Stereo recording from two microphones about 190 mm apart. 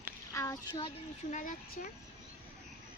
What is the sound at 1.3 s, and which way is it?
Speech, 45° left (ahead or behind).